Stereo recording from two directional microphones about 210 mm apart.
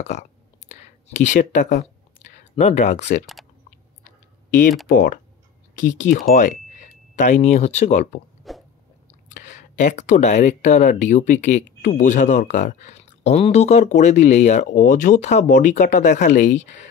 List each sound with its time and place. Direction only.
0.7 s speech: 35° left (ahead or behind)
4.5 s speech: 40° left (ahead or behind)
8.5 s a sound: centre (ahead or behind)
9.3 s speech: 35° left (ahead or behind)